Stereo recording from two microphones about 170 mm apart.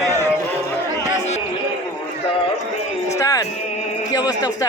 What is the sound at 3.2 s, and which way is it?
Music, 20° left (ahead or behind).